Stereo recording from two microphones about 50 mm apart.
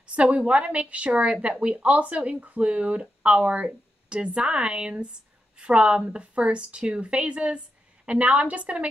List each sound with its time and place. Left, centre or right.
0.0 s a woman's voice: right